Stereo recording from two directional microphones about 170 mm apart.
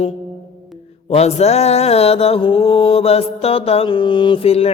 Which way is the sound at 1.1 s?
40° left (ahead or behind).